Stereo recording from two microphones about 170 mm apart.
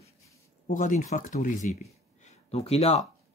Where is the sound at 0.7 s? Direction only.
50° left (ahead or behind).